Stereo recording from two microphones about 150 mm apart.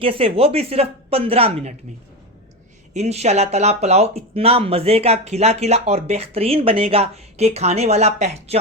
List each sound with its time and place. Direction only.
0.0 s speech: 40° right (ahead or behind)
2.9 s speech: 45° right (ahead or behind)